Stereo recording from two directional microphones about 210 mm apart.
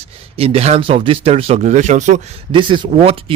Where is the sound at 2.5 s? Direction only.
25° right (ahead or behind).